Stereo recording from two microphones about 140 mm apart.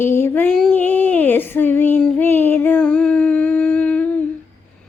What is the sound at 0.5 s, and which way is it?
Child singing, 5° left (ahead or behind).